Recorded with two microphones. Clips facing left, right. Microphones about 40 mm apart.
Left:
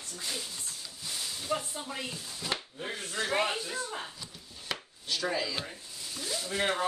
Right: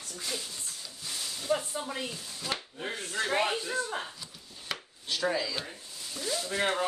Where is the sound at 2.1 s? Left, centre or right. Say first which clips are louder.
Even; centre.